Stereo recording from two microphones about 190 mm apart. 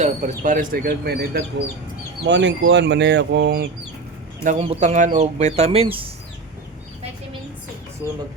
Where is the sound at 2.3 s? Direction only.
70° right (ahead or behind).